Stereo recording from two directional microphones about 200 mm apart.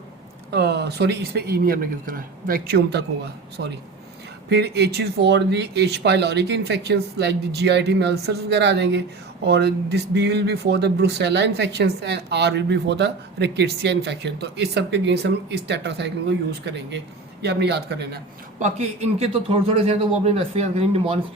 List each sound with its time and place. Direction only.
0.5 s speech: 55° right (ahead or behind)
4.4 s speech: 55° right (ahead or behind)
18.6 s a man's voice: 30° right (ahead or behind)